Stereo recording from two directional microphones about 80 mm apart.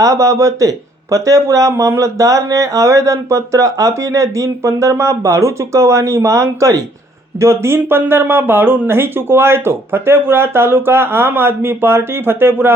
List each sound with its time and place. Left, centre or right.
0.0 s speech: right